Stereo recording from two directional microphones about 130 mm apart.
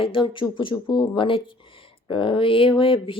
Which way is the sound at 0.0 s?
40° left (ahead or behind).